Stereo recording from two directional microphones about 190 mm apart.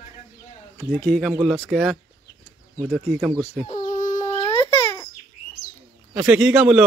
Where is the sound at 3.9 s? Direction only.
40° left (ahead or behind).